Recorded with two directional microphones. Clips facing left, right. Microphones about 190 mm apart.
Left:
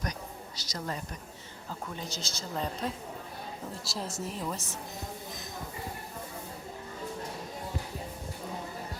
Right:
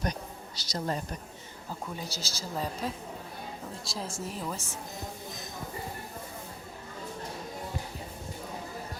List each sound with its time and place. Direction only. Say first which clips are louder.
0.0 s a sound: right 3 dB; 30° right (ahead or behind)
2.0 s a woman's voice: even; 35° right (ahead or behind)
2.4 s a woman's voice: even; 5° right (ahead or behind)
4.2 s a woman's voice: left 1 dB; centre (ahead or behind)